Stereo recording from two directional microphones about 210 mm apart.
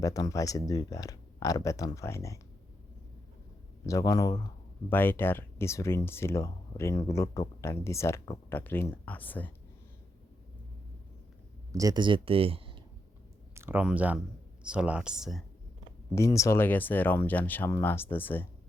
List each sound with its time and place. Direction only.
0.0 s speech: 15° left (ahead or behind)
3.8 s speech: 15° left (ahead or behind)
11.7 s speech: 15° right (ahead or behind)
13.6 s speech: 10° right (ahead or behind)
16.1 s speech: 15° left (ahead or behind)